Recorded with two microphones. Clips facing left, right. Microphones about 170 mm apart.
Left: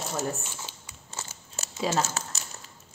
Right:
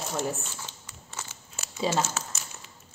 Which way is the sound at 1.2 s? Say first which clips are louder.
Left 2 dB; 40° left (ahead or behind).